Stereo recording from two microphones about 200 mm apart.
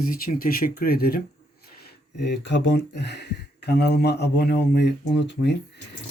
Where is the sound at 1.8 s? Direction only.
55° left (ahead or behind).